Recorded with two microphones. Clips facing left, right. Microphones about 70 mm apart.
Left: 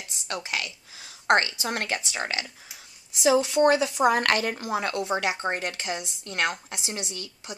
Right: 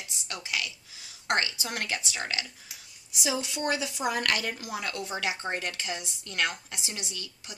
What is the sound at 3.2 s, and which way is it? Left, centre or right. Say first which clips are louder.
A woman's voice: left 11 dB; left.